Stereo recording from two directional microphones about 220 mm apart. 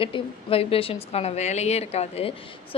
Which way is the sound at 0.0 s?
25° left (ahead or behind).